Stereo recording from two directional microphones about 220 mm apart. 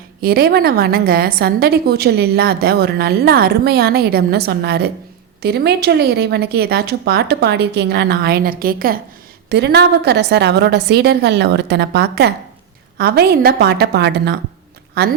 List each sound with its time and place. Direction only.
0.2 s a woman's voice: 45° right (ahead or behind)